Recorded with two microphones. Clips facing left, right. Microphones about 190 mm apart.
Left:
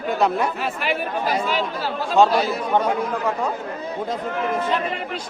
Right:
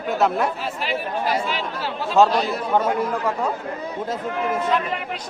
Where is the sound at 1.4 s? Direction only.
45° left (ahead or behind).